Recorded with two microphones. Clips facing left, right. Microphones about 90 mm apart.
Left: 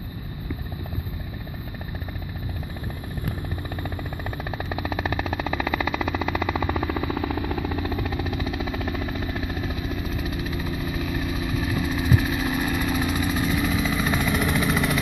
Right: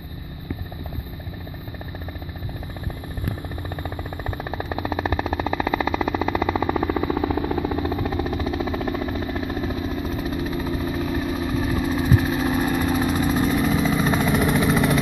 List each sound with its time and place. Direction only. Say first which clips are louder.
5.0 s vehicle: right 3 dB; 20° right (ahead or behind)
6.3 s vehicle: right 4 dB; 30° right (ahead or behind)